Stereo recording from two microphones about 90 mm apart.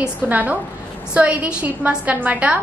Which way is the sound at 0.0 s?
15° right (ahead or behind).